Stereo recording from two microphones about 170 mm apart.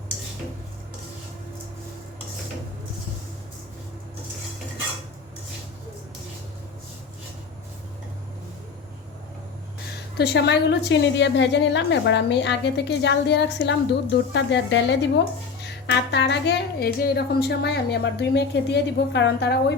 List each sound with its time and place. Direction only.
10.2 s a woman's voice: 75° left (ahead or behind)